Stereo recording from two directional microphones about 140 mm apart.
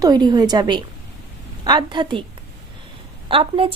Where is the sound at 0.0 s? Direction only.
30° right (ahead or behind).